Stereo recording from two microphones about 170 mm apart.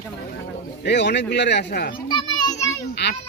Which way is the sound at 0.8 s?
85° left.